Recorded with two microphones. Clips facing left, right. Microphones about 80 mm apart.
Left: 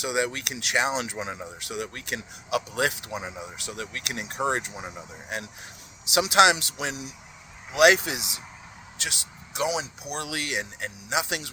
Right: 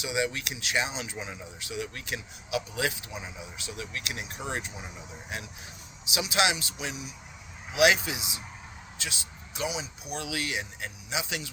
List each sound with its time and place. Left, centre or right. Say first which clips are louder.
0.0 s speech: left 3 dB; left
4.9 s speech: left 3 dB; left
7.7 s speech: left 4 dB; left